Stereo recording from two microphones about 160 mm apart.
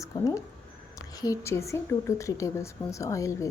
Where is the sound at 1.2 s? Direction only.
20° left (ahead or behind).